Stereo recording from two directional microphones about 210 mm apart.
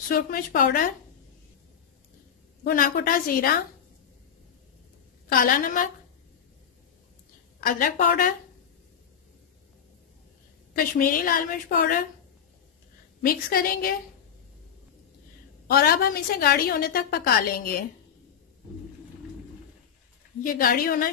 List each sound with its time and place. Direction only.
0.1 s a woman's voice: 45° left (ahead or behind)
2.6 s a woman's voice: 40° left (ahead or behind)
5.3 s a woman's voice: 40° left (ahead or behind)
7.6 s a woman's voice: 40° left (ahead or behind)
10.7 s a woman's voice: 45° left (ahead or behind)
13.2 s a woman's voice: 45° left (ahead or behind)
15.6 s a woman's voice: 45° left (ahead or behind)
20.5 s a woman's voice: 45° left (ahead or behind)